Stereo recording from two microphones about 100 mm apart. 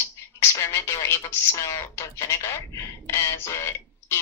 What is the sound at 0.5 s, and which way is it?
Speech, 25° left (ahead or behind).